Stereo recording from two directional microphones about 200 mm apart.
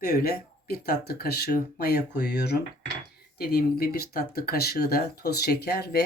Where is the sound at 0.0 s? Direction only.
50° left (ahead or behind).